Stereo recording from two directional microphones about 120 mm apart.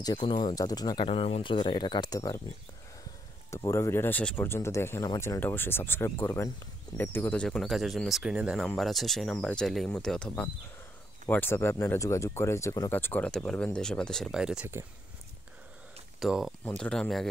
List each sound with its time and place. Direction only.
0.0 s speech: 40° left (ahead or behind)
0.6 s speech: 35° left (ahead or behind)
1.0 s speech: 55° left (ahead or behind); by 2.4 s 30° left (ahead or behind)
3.4 s speech: 25° left (ahead or behind)
4.5 s speech: 20° left (ahead or behind)
7.4 s speech: centre (ahead or behind); by 12.9 s 30° left (ahead or behind)
12.9 s speech: 15° left (ahead or behind); by 14.7 s 5° right (ahead or behind)
16.2 s speech: 5° right (ahead or behind)
16.6 s speech: 10° left (ahead or behind)